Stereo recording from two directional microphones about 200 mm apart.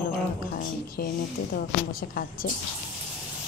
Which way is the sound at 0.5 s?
50° left (ahead or behind).